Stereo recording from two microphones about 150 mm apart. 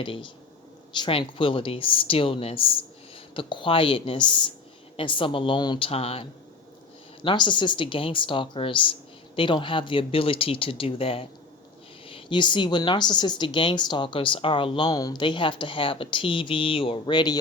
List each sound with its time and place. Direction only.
0.0 s a woman's voice: 35° left (ahead or behind)